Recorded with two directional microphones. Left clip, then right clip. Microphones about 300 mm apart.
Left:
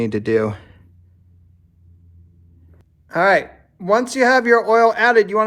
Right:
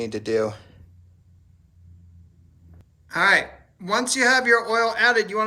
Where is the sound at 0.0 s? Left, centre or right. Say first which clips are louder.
Left 5 dB; left.